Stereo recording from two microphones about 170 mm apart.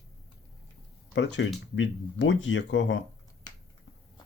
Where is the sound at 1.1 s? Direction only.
90° left.